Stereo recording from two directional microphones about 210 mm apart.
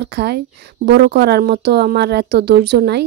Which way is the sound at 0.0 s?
50° right (ahead or behind).